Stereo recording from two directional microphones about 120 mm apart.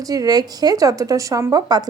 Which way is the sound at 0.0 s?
30° right (ahead or behind).